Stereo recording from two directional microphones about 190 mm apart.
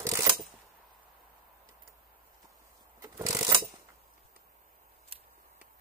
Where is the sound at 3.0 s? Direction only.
15° right (ahead or behind).